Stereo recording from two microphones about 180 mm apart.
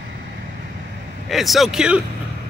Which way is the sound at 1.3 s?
Centre (ahead or behind).